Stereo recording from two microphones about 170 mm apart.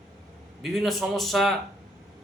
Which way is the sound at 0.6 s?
Centre (ahead or behind).